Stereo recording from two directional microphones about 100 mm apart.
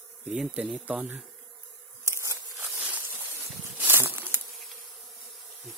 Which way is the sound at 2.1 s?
30° right (ahead or behind).